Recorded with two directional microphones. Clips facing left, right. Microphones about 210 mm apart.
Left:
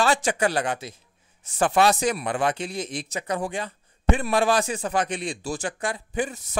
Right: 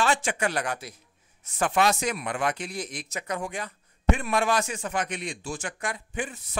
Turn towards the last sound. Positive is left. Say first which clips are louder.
# left 6 dB
turn(degrees=45)  # may be behind; listen again after turning